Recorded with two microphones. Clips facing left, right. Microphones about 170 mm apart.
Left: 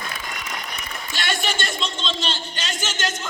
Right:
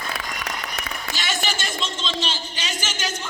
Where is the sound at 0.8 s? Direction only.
80° right.